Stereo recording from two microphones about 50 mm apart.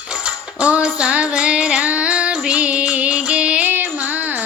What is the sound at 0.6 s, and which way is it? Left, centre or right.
Female singing, right.